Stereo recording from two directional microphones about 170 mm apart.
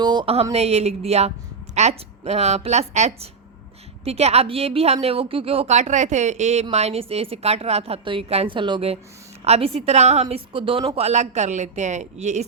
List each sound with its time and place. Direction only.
0.0 s a woman's voice: 25° right (ahead or behind); by 12.5 s 40° right (ahead or behind)